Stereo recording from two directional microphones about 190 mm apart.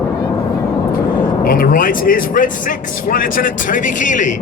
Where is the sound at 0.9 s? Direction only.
50° left (ahead or behind).